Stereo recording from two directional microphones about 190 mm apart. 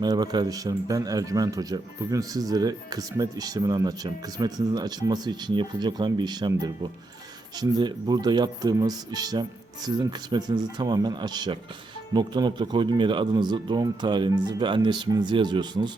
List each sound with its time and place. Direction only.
0.0 s speech: 20° right (ahead or behind)